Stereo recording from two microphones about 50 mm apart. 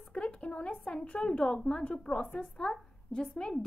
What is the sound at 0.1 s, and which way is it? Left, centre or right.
A woman's voice, left.